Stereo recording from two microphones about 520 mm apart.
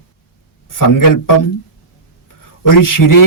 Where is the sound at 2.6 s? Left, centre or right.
Left.